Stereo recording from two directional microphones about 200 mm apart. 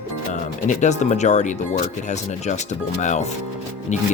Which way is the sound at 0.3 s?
40° left (ahead or behind).